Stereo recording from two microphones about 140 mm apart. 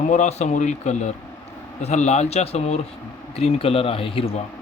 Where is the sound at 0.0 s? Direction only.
60° left (ahead or behind).